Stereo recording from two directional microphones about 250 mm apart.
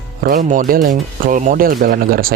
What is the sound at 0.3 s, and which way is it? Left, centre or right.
Speech, right.